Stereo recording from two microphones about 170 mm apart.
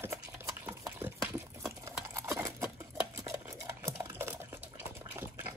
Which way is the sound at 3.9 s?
15° right (ahead or behind).